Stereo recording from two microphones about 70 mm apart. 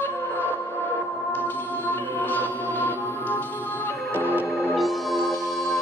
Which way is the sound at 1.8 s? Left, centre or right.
Left.